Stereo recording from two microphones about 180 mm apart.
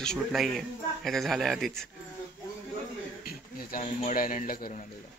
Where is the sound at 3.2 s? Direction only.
55° left (ahead or behind).